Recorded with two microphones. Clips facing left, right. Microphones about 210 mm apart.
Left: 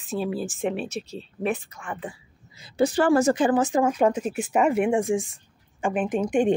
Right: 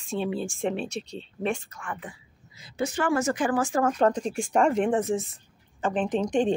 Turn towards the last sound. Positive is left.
turn(degrees=10)  # may be behind; listen again after turning